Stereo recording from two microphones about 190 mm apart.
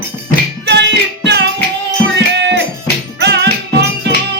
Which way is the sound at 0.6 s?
65° right (ahead or behind).